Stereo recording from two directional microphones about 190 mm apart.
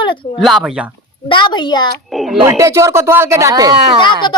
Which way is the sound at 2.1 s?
Centre (ahead or behind).